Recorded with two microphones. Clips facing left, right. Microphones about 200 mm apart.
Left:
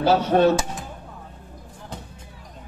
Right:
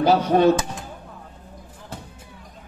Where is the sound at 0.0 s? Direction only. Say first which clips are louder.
Right 1 dB; 15° right (ahead or behind).